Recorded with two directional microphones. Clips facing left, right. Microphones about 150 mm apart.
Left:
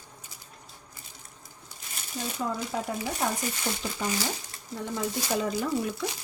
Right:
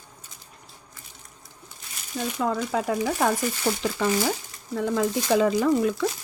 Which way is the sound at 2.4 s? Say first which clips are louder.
Right 6 dB; 75° right (ahead or behind).